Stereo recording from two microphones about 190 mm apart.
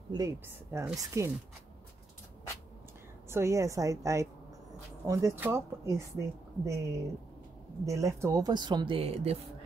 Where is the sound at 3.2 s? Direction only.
15° right (ahead or behind).